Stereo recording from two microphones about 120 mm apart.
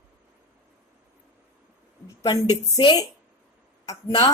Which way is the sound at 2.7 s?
40° left (ahead or behind).